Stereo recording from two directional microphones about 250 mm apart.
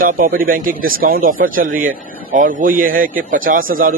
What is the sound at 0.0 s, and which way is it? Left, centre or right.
Speech, right.